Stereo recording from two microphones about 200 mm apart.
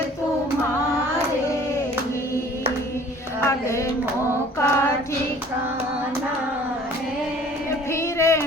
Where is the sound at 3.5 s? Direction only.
15° left (ahead or behind).